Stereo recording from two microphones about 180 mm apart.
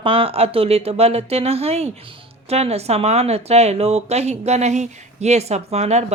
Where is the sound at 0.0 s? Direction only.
30° right (ahead or behind).